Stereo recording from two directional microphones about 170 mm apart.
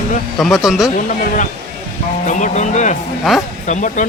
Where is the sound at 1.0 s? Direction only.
50° left (ahead or behind).